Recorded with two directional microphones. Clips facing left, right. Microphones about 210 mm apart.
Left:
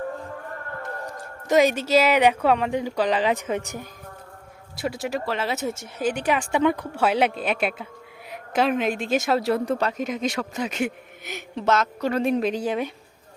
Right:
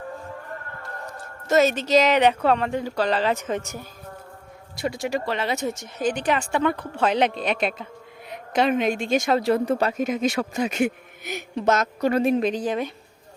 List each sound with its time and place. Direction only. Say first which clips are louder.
0.8 s a woman's voice: left 3 dB; 15° left (ahead or behind); by 10.8 s 10° right (ahead or behind)
11.7 s a woman's voice: even; 40° right (ahead or behind)
12.0 s a woman's voice: right 3 dB; 5° right (ahead or behind); by 12.9 s 10° left (ahead or behind)